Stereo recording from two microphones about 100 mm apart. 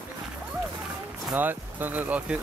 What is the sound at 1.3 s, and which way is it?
Speech, 20° right (ahead or behind).